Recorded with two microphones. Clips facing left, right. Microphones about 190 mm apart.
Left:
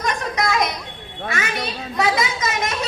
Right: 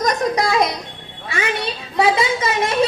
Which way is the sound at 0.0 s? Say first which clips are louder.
Right 5 dB; 35° right (ahead or behind).